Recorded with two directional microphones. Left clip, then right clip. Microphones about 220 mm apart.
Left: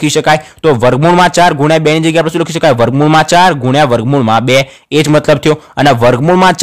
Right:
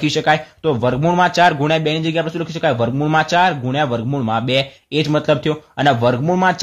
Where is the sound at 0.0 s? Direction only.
35° left (ahead or behind).